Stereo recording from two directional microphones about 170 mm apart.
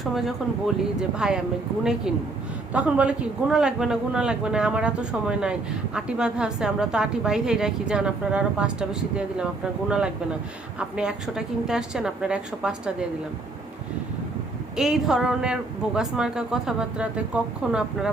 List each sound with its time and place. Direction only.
0.0 s speech: centre (ahead or behind)
10.8 s speech: 5° right (ahead or behind)
14.8 s speech: centre (ahead or behind)